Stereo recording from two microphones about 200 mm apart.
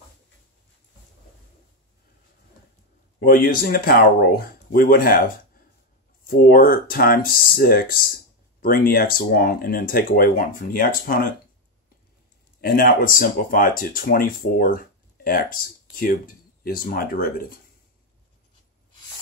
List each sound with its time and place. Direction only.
3.2 s speech: 45° left (ahead or behind)
12.5 s speech: 45° left (ahead or behind)